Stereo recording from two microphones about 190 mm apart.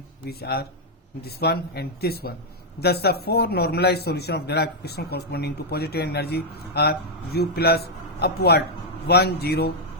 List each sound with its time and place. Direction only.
0.3 s a man's voice: 55° left (ahead or behind)